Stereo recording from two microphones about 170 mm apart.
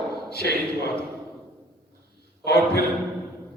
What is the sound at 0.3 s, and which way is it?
Speech, 70° left (ahead or behind).